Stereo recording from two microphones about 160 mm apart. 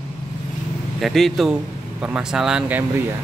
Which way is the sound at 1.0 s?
Centre (ahead or behind).